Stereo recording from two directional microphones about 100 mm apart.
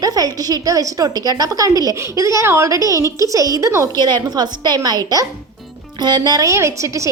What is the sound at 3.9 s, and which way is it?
A woman's voice, 45° right (ahead or behind).